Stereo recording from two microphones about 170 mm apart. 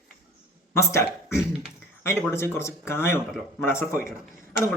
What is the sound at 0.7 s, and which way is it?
Speech, 15° left (ahead or behind).